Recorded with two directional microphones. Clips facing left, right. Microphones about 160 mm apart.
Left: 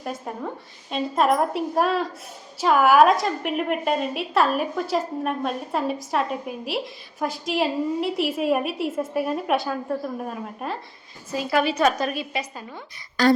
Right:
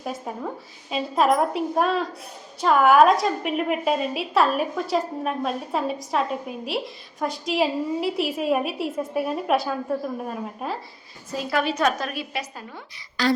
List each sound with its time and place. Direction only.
0.0 s a woman's voice: centre (ahead or behind)
13.2 s speech: 45° left (ahead or behind)